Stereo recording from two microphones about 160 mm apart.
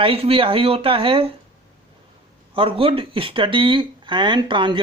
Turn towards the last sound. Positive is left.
turn(degrees=-30)  # may be behind; listen again after turning